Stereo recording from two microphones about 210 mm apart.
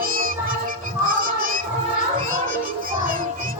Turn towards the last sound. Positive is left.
turn(degrees=-40)  # may be behind; listen again after turning